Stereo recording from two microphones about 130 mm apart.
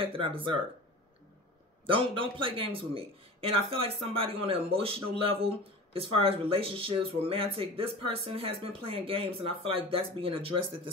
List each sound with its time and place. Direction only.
0.0 s speech: 45° right (ahead or behind)
1.9 s speech: 40° right (ahead or behind)